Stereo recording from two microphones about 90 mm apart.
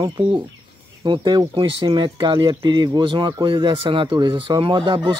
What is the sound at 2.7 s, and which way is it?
Speech, 55° right (ahead or behind).